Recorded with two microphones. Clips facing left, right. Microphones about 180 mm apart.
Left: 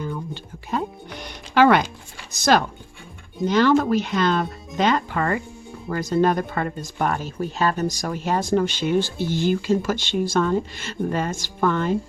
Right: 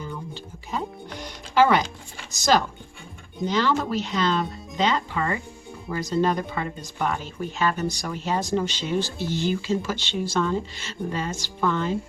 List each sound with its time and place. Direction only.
0.7 s music: 60° left (ahead or behind)
2.3 s speech: 60° left (ahead or behind)
7.3 s speech: 40° left (ahead or behind); by 11.9 s 55° left (ahead or behind)